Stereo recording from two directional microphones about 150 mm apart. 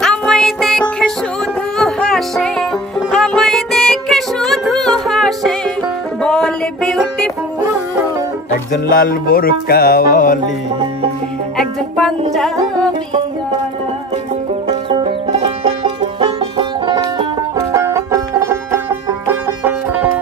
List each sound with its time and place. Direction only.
0.0 s music: 5° left (ahead or behind)
8.8 s music: 70° left (ahead or behind)
11.5 s music: 5° left (ahead or behind)
14.7 s music: 35° right (ahead or behind); by 20.1 s 10° right (ahead or behind)